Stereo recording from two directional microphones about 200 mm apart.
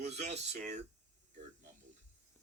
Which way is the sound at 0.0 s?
35° right (ahead or behind).